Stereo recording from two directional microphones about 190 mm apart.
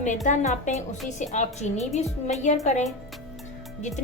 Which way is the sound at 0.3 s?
40° left (ahead or behind).